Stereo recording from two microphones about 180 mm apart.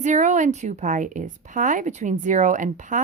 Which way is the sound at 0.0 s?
40° right (ahead or behind).